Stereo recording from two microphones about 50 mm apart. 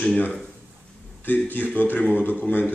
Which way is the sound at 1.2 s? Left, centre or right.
Left.